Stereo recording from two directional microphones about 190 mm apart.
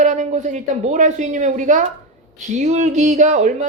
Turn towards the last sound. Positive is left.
turn(degrees=-40)  # may be behind; listen again after turning